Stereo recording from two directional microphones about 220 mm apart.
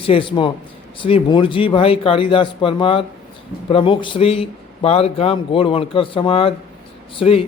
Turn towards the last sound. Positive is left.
turn(degrees=25)  # may be behind; listen again after turning